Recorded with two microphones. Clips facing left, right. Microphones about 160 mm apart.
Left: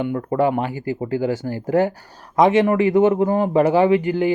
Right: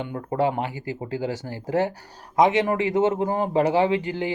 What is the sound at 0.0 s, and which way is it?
Speech, 55° left (ahead or behind).